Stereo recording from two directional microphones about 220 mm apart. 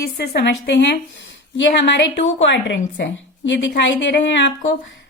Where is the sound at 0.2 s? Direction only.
45° left (ahead or behind).